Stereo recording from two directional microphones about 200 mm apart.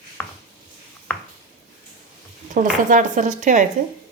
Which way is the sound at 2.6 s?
40° right (ahead or behind).